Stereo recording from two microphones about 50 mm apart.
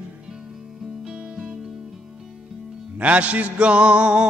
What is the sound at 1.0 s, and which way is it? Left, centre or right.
Music, centre.